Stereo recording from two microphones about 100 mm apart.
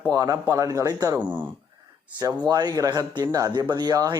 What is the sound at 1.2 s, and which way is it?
Speech, 20° right (ahead or behind).